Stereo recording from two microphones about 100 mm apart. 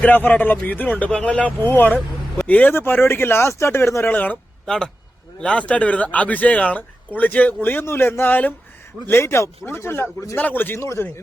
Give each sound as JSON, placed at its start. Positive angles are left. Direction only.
{"t": 0.0, "sound": "speech", "side_deg": 20}
{"t": 4.6, "sound": "speech", "side_deg": 5}